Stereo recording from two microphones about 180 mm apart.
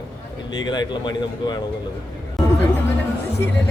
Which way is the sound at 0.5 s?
25° left (ahead or behind).